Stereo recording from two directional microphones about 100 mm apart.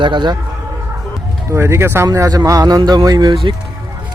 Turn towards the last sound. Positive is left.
turn(degrees=-40)  # may be behind; listen again after turning